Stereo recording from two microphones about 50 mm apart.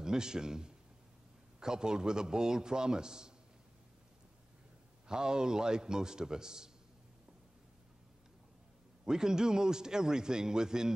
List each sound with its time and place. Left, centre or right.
0.0 s a man's voice: centre
5.0 s a man's voice: centre
9.0 s a man's voice: centre